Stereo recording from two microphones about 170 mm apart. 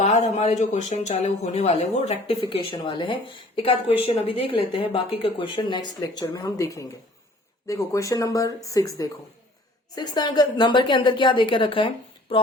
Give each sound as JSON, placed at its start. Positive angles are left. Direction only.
{"t": 0.0, "sound": "speech", "side_deg": 40}